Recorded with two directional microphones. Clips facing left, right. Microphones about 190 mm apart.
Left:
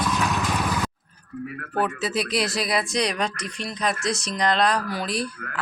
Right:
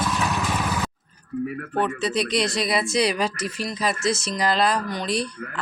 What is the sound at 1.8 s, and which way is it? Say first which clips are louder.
Speech: right 1 dB; centre (ahead or behind).